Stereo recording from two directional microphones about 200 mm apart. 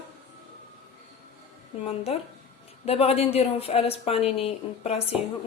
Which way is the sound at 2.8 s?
30° left (ahead or behind).